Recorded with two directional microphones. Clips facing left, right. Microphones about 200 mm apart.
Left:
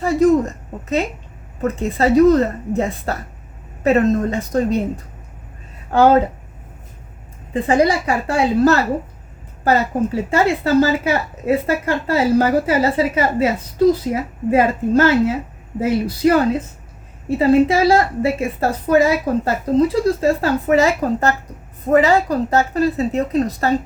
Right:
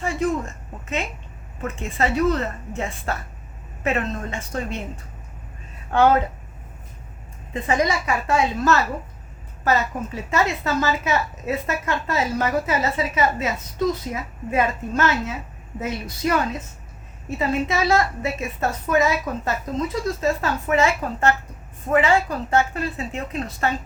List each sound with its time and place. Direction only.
0.0 s a woman's voice: 40° left (ahead or behind)
5.9 s a woman's voice: 35° left (ahead or behind)
7.5 s a woman's voice: 30° left (ahead or behind)